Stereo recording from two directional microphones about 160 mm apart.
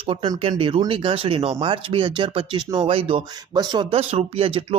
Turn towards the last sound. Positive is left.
turn(degrees=-35)  # may be behind; listen again after turning